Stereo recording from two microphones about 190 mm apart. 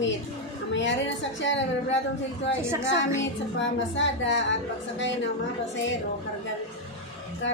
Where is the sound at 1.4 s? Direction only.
75° left (ahead or behind).